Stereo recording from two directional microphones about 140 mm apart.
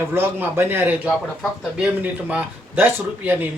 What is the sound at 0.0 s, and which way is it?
Speech, 15° right (ahead or behind).